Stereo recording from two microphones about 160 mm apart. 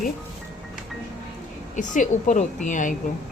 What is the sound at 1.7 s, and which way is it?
A woman's voice, 50° left (ahead or behind).